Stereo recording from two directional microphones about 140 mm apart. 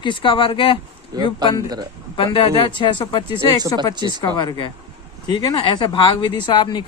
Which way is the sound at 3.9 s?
30° right (ahead or behind).